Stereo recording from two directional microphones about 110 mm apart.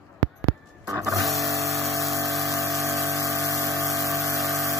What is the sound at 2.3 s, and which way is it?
Pump, centre (ahead or behind).